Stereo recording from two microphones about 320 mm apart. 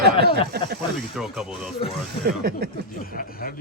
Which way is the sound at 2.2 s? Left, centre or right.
Right.